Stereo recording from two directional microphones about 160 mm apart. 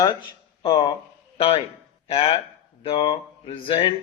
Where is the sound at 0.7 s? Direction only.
30° left (ahead or behind).